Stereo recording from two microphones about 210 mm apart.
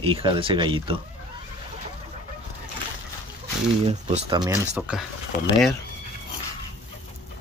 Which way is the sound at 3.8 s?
30° right (ahead or behind).